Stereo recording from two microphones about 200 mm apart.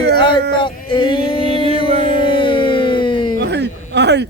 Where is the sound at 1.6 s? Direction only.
30° right (ahead or behind).